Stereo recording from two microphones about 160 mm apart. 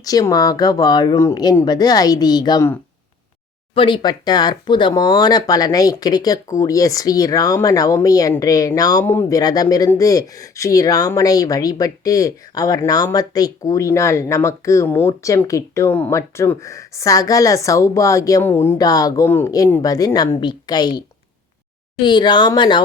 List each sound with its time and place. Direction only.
0.0 s speech: 25° left (ahead or behind)
3.8 s speech: 30° left (ahead or behind)
22.0 s speech: 30° left (ahead or behind)